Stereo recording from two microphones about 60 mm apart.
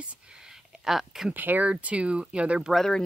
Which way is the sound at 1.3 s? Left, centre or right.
Right.